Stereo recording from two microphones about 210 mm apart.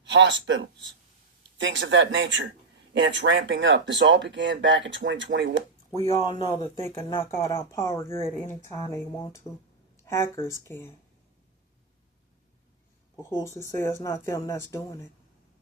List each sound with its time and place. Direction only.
0.0 s speech: 60° right (ahead or behind)
6.1 s speech: 25° left (ahead or behind)
6.7 s speech: 15° left (ahead or behind)
13.3 s speech: 15° left (ahead or behind)